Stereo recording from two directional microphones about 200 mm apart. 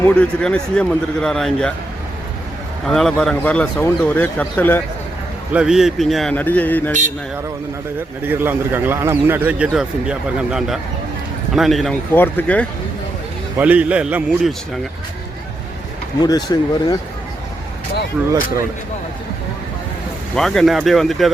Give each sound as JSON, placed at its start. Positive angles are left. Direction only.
{"t": 0.0, "sound": "a man's voice", "side_deg": 5}
{"t": 2.8, "sound": "speech", "side_deg": 0}
{"t": 5.5, "sound": "a man's voice", "side_deg": -5}
{"t": 8.2, "sound": "a man's voice", "side_deg": -10}
{"t": 13.6, "sound": "a man's voice", "side_deg": -5}
{"t": 16.2, "sound": "speech", "side_deg": 20}
{"t": 18.2, "sound": "a man's voice", "side_deg": -5}
{"t": 20.3, "sound": "a man's voice", "side_deg": 0}